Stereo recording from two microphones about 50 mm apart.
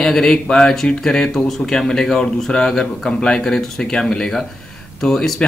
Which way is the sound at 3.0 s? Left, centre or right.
Centre.